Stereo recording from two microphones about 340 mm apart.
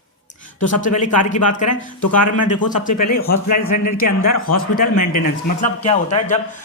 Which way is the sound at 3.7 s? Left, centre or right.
Left.